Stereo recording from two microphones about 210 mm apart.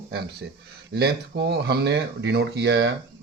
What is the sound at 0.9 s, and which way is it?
Speech, 50° right (ahead or behind).